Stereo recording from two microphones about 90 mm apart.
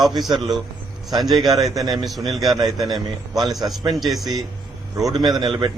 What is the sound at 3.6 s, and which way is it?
Speech, 60° right (ahead or behind).